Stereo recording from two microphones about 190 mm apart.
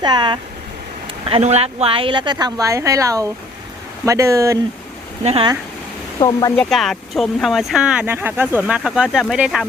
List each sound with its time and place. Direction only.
0.0 s speech: 25° right (ahead or behind)
5.2 s speech: 30° right (ahead or behind)
6.1 s speech: 20° left (ahead or behind)
6.7 s speech: centre (ahead or behind)